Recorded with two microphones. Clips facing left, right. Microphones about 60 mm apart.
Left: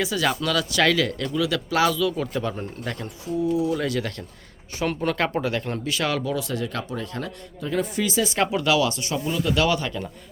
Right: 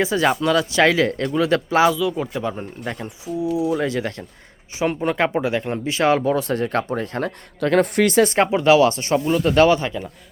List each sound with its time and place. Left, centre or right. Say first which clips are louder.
0.0 s speech: right 5 dB; right
1.8 s speech: right 4 dB; centre; by 7.3 s right
7.6 s speech: right 8 dB; right
8.4 s speech: right 5 dB; right